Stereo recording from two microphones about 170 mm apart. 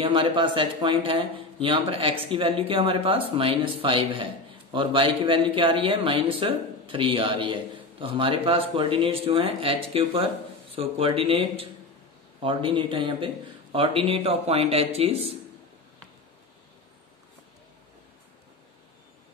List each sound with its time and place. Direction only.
0.0 s a man's voice: 30° right (ahead or behind)